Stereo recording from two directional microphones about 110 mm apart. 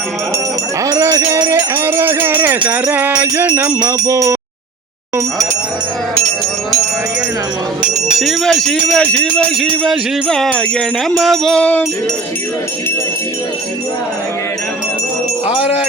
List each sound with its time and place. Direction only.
0.9 s music: 30° right (ahead or behind)
1.7 s music: 20° right (ahead or behind)
3.8 s music: 25° right (ahead or behind)
8.2 s speech: centre (ahead or behind)